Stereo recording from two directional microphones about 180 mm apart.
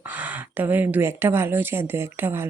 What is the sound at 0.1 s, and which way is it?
A woman's voice, 10° right (ahead or behind).